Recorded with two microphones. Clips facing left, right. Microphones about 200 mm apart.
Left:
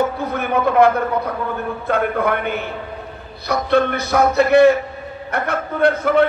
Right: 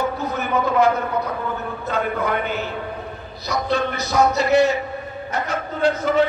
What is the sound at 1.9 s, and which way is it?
A man's voice, 55° left (ahead or behind).